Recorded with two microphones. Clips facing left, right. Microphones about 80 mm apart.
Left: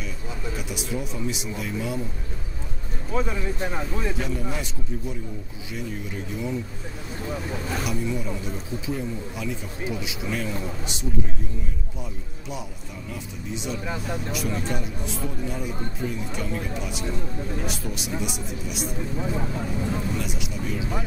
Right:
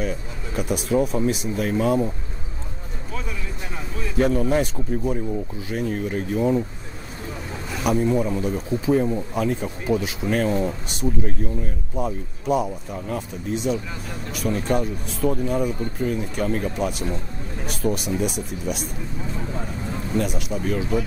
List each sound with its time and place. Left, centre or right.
0.6 s speech: right
3.2 s speech: left
4.2 s speech: right
7.8 s speech: right
20.2 s speech: right